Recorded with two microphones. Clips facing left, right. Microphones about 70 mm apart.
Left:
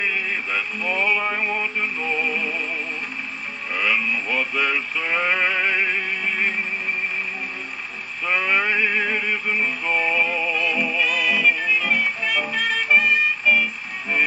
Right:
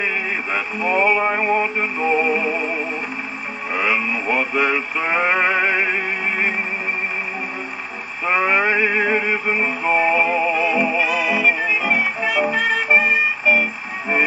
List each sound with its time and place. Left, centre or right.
0.0 s radio: centre
3.7 s male singing: right
8.3 s music: right
11.0 s music: centre